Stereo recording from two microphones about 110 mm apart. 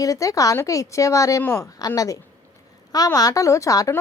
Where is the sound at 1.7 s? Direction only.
35° left (ahead or behind).